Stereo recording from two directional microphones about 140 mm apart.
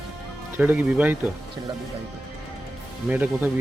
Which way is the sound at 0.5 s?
10° right (ahead or behind).